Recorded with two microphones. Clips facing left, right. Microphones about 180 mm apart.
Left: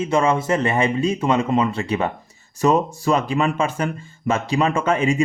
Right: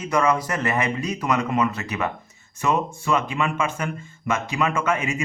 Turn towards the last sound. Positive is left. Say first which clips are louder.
# left 6 dB
turn(degrees=30)  # may be behind; listen again after turning